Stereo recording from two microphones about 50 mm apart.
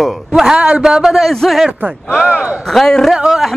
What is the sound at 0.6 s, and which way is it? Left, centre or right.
Speech, centre.